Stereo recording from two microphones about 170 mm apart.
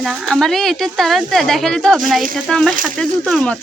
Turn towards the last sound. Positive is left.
turn(degrees=5)  # may be behind; listen again after turning